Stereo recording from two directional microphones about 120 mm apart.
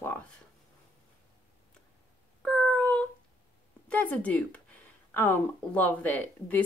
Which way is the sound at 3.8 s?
10° left (ahead or behind).